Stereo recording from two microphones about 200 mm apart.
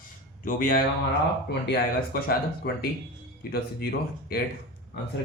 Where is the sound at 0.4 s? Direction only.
45° left (ahead or behind).